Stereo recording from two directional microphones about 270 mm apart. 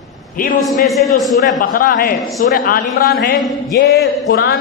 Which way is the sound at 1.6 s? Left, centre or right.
Left.